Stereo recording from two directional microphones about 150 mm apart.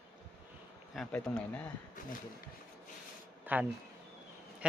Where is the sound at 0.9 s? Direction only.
5° left (ahead or behind).